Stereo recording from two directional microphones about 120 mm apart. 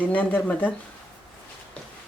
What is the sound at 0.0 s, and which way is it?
Speech, 10° left (ahead or behind).